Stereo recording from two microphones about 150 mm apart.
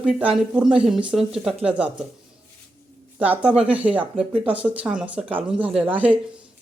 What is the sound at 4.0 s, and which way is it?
Speech, 35° right (ahead or behind).